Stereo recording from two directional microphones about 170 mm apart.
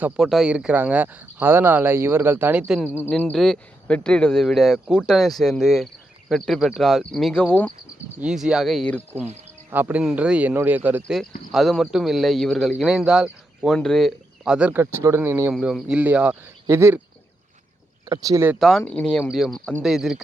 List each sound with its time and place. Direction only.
0.0 s speech: centre (ahead or behind)
8.2 s speech: 5° right (ahead or behind)
9.6 s speech: 10° right (ahead or behind)
15.5 s speech: centre (ahead or behind)
18.1 s speech: 20° right (ahead or behind)
18.9 s speech: 5° left (ahead or behind)